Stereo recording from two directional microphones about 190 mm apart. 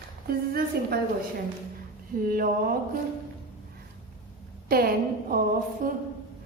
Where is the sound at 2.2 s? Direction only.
50° right (ahead or behind).